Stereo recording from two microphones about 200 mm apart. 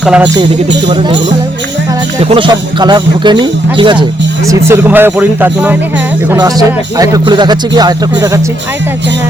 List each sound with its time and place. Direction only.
0.0 s speech: 5° right (ahead or behind)
2.3 s speech: 25° right (ahead or behind)
4.4 s speech: 10° right (ahead or behind)